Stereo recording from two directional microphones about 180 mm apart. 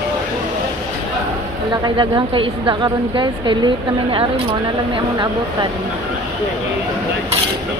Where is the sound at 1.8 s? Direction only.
25° right (ahead or behind).